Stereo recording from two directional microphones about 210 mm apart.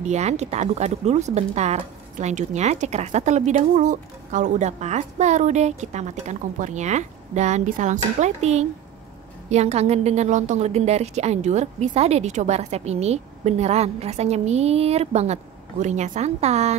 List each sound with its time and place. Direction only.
0.0 s speech: 30° right (ahead or behind)